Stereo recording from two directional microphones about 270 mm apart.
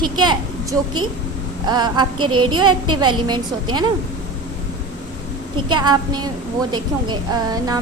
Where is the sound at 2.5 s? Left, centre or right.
Centre.